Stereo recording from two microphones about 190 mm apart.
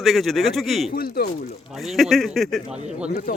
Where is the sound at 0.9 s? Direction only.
55° left (ahead or behind).